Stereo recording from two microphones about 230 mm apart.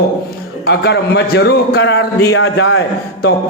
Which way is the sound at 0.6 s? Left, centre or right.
Left.